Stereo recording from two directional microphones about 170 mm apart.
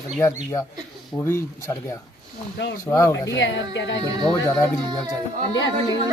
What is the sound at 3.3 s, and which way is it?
Speech, 90° left.